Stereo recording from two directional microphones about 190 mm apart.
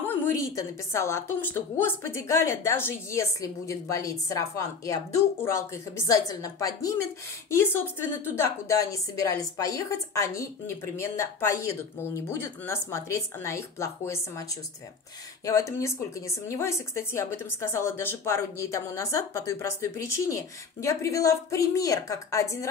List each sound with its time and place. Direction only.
0.0 s a woman's voice: 10° left (ahead or behind)
15.4 s a woman's voice: 15° left (ahead or behind)